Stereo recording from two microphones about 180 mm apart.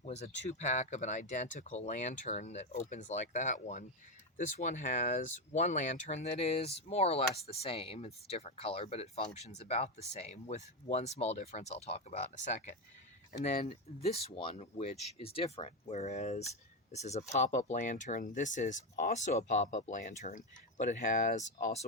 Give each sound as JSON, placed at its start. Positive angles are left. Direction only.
{"t": 0.0, "sound": "speech", "side_deg": 40}